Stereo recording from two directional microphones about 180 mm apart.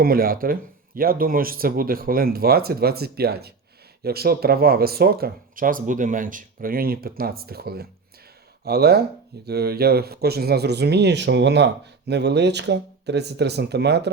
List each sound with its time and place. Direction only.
0.0 s speech: 55° right (ahead or behind)